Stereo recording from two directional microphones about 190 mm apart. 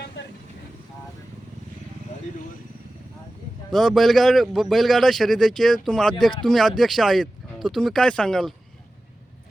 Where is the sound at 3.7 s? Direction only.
Centre (ahead or behind).